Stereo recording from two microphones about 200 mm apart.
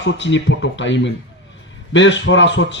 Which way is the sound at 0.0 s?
65° left (ahead or behind).